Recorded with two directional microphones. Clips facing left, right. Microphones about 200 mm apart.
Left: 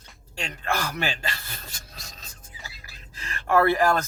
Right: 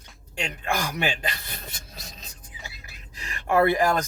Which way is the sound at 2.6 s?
15° right (ahead or behind).